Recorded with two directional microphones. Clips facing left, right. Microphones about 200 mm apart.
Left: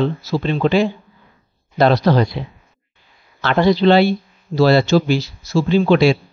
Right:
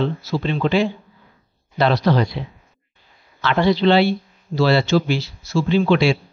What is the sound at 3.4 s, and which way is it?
A man's voice, 45° left (ahead or behind).